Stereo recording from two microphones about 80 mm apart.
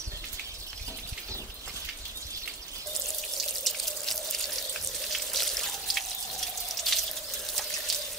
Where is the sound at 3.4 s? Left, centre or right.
Centre.